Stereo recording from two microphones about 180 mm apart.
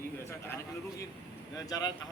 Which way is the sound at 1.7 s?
20° left (ahead or behind).